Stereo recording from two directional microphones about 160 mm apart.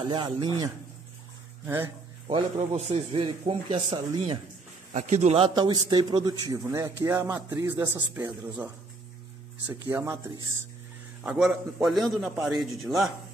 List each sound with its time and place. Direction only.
0.0 s a man's voice: 30° right (ahead or behind)
2.2 s a man's voice: 40° right (ahead or behind)
4.9 s a man's voice: 50° right (ahead or behind)
5.5 s a man's voice: 25° right (ahead or behind)
11.2 s a man's voice: 5° right (ahead or behind)